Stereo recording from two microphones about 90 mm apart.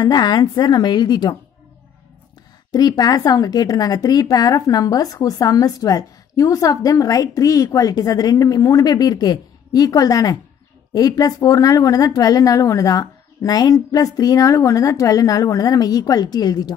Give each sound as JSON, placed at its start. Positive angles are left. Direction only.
{"t": 0.0, "sound": "a woman's voice", "side_deg": 50}
{"t": 2.7, "sound": "a woman's voice", "side_deg": 45}